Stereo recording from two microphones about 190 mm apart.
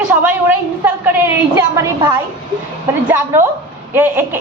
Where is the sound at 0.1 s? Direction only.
10° right (ahead or behind).